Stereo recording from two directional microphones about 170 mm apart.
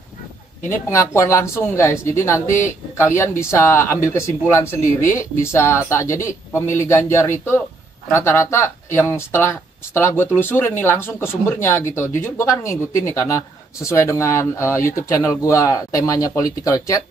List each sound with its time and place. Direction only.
0.7 s speech: 15° left (ahead or behind)